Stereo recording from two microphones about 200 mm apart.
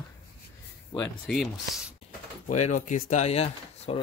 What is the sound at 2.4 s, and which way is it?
Speech, 35° left (ahead or behind).